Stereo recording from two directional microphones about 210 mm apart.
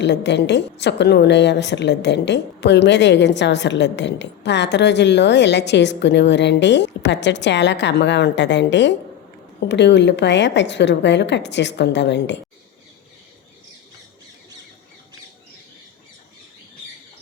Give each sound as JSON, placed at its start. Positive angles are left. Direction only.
{"t": 0.0, "sound": "a woman's voice", "side_deg": 55}